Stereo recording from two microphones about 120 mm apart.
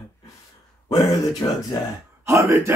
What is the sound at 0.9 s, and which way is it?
Speech, 30° left (ahead or behind).